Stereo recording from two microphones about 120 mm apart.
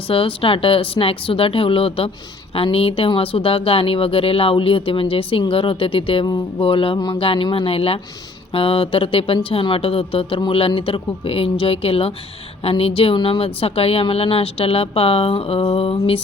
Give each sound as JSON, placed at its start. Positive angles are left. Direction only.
{"t": 0.1, "sound": "speech", "side_deg": 50}